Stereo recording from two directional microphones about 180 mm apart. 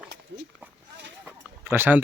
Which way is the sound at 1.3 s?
10° right (ahead or behind).